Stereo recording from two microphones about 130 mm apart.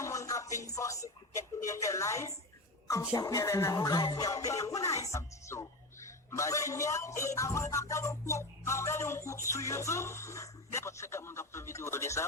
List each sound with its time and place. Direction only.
0.0 s speech: 25° left (ahead or behind)